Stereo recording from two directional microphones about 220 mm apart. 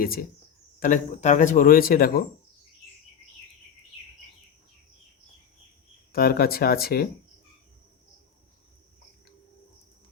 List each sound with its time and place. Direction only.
0.0 s speech: 40° left (ahead or behind)
6.1 s speech: 45° left (ahead or behind)